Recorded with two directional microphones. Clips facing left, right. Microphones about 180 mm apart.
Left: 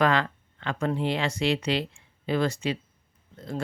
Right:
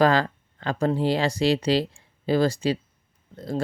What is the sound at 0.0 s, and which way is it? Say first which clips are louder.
Speech: right 4 dB; 35° right (ahead or behind).